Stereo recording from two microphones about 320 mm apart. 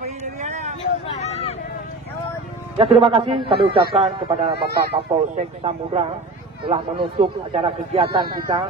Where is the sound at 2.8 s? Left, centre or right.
Centre.